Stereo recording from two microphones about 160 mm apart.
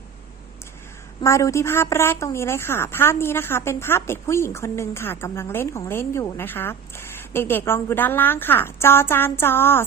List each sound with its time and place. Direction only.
1.2 s a woman's voice: 20° left (ahead or behind)